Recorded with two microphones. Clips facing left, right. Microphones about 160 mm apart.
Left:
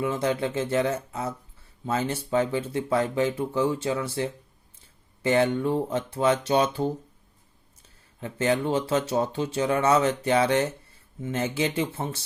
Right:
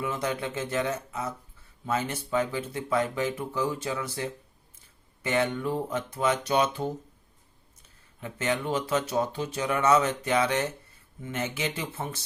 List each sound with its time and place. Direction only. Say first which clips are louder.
0.0 s speech: left 5 dB; 30° left (ahead or behind)
8.2 s speech: left 5 dB; 30° left (ahead or behind)